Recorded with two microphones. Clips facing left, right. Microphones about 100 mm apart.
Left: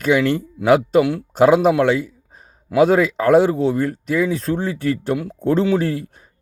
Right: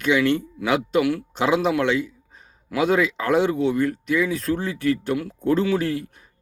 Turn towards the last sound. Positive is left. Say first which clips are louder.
# left 3 dB
turn(degrees=30)  # may be behind; listen again after turning